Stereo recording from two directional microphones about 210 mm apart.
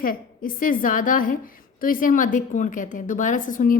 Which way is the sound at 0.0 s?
40° left (ahead or behind).